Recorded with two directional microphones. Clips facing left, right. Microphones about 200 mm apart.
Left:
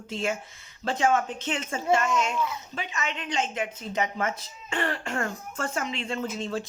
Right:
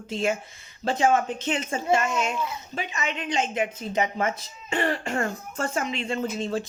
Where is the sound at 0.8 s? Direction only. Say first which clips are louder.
Right 3 dB; 35° right (ahead or behind).